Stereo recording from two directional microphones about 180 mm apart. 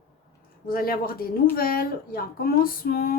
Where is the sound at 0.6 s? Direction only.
55° left (ahead or behind).